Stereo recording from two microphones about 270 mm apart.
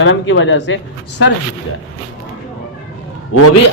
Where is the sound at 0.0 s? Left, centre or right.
Left.